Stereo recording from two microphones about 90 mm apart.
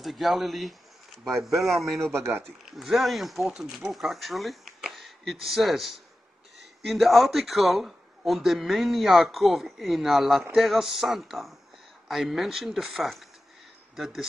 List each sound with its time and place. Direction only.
0.0 s speech: centre (ahead or behind)
2.1 s speech: 30° right (ahead or behind)
2.6 s speech: 5° right (ahead or behind)